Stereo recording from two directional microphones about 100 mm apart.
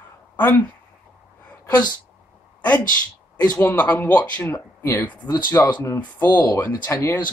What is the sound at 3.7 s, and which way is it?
Speech, 20° left (ahead or behind).